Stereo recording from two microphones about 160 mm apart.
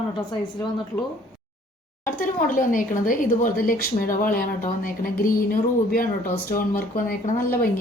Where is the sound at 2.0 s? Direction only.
55° left (ahead or behind).